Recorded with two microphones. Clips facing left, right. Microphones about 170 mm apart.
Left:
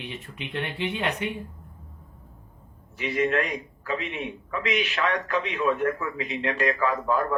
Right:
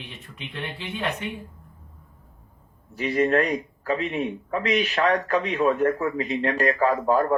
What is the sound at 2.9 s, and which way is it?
A man's voice, 40° right (ahead or behind).